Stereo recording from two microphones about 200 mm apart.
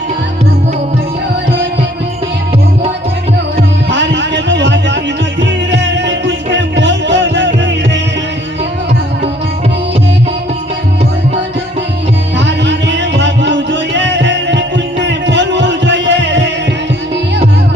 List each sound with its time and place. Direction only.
3.8 s music: 60° right (ahead or behind)
12.5 s music: 60° right (ahead or behind)